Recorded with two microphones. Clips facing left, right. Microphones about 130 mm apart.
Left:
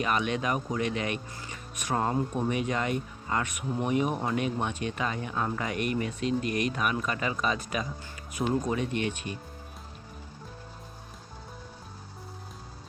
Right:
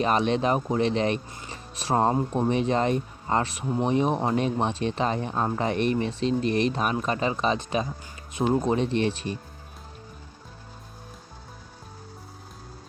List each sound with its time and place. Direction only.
0.0 s speech: 30° right (ahead or behind)